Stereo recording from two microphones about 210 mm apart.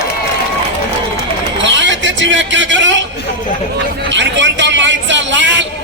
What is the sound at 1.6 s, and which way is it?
Vehicle, 60° right (ahead or behind).